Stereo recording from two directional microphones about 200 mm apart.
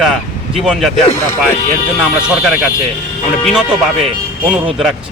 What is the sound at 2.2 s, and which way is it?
Speech, 5° right (ahead or behind).